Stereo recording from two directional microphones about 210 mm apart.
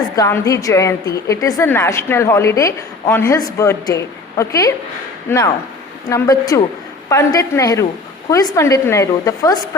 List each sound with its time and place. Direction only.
0.2 s a woman's voice: 15° left (ahead or behind)